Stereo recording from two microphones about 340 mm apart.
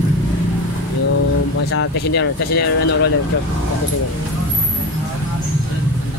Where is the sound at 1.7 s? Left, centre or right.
Left.